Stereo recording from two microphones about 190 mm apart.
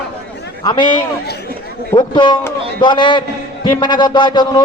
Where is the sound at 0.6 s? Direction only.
20° left (ahead or behind).